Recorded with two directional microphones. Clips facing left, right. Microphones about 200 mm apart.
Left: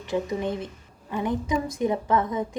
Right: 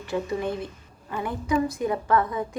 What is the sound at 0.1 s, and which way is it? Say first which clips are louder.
A woman's voice: left 1 dB; 20° left (ahead or behind).